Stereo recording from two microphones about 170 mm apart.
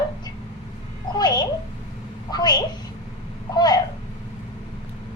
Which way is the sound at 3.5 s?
25° left (ahead or behind).